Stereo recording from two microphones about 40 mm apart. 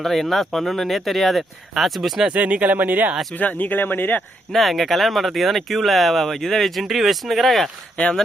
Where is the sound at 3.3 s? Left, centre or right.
Left.